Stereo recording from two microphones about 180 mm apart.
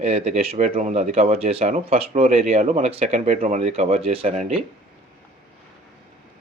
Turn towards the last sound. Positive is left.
turn(degrees=-35)  # may be behind; listen again after turning